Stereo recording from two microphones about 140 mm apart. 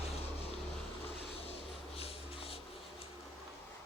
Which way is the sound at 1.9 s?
45° left (ahead or behind).